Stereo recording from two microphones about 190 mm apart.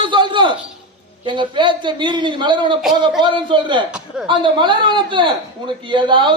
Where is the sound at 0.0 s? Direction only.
25° right (ahead or behind).